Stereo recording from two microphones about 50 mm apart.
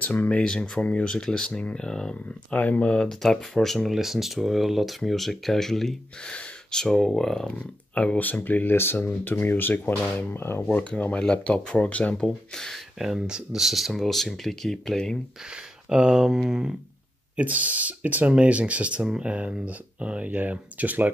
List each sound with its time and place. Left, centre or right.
0.0 s speech: left
0.4 s speech: centre
0.7 s speech: left
1.0 s speech: centre
2.5 s speech: left
2.8 s speech: centre
3.1 s speech: centre
3.9 s speech: centre
6.2 s speech: centre
7.9 s speech: left
10.7 s speech: left
12.7 s speech: centre
15.5 s speech: centre
17.4 s speech: right